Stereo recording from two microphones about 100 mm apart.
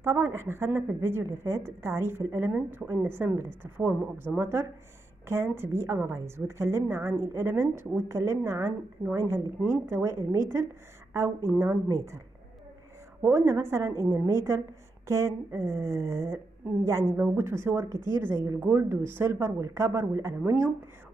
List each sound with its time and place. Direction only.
0.0 s a woman's voice: 25° right (ahead or behind)
13.3 s a woman's voice: 25° right (ahead or behind)